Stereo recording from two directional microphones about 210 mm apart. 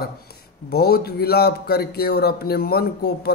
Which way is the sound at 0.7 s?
50° left (ahead or behind).